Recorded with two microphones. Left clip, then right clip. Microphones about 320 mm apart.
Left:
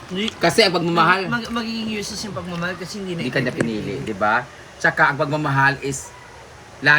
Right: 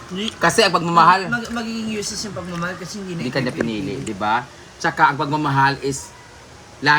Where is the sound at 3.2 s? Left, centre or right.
Centre.